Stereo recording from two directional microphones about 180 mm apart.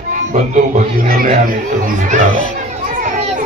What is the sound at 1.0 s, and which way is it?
Speech, 50° right (ahead or behind).